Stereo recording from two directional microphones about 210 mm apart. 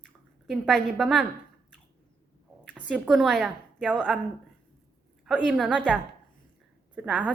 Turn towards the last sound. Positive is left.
turn(degrees=-5)  # may be behind; listen again after turning